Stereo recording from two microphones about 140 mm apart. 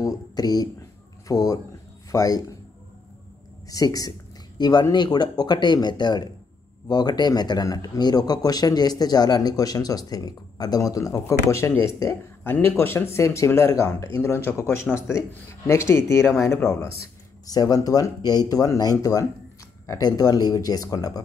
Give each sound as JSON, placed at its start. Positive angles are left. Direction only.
{"t": 0.0, "sound": "a sound", "side_deg": 25}
{"t": 1.2, "sound": "speech", "side_deg": 25}
{"t": 3.6, "sound": "speech", "side_deg": 25}
{"t": 17.5, "sound": "speech", "side_deg": 25}